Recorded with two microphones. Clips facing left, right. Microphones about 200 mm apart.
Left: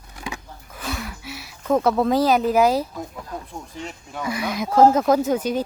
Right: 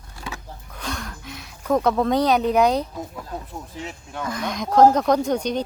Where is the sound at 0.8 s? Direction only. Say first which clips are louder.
Left 2 dB; 5° left (ahead or behind).